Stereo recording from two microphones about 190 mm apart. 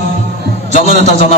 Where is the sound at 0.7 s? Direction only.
35° left (ahead or behind).